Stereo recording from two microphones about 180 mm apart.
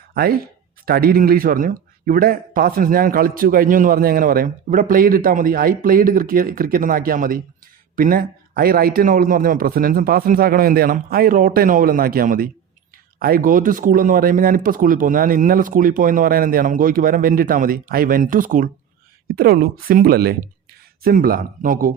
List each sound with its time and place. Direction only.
0.1 s speech: 60° right (ahead or behind)